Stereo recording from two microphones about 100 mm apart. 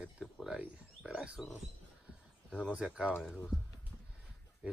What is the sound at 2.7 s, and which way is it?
Speech, 10° right (ahead or behind).